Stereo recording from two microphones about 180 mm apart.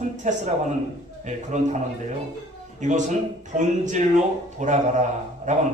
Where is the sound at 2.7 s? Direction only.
45° right (ahead or behind).